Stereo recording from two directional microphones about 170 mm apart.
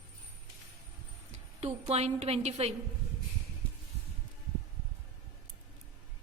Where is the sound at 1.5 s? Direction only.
35° right (ahead or behind).